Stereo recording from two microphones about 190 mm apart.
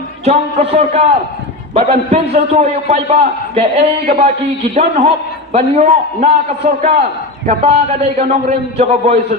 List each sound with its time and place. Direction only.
0.3 s a man's voice: 35° right (ahead or behind)